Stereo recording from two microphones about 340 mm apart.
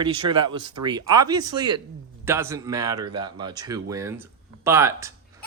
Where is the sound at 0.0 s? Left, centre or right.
Centre.